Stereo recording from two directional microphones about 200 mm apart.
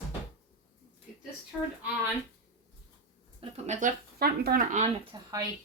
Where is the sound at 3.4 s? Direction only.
35° right (ahead or behind).